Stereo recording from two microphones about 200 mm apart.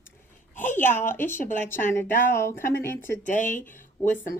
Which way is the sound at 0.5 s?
10° left (ahead or behind).